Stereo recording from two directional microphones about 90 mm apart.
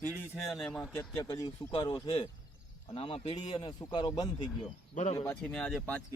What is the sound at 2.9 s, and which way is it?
Speech, 90° left.